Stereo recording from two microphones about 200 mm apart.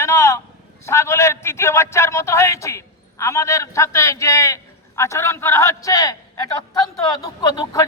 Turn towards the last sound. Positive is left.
turn(degrees=20)  # may be behind; listen again after turning